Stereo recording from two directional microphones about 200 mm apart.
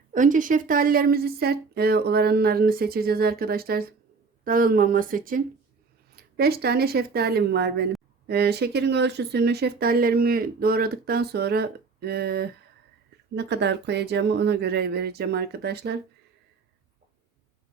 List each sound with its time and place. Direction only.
0.1 s speech: 40° right (ahead or behind)